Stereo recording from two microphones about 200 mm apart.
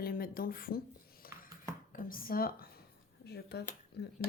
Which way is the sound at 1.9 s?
45° left (ahead or behind).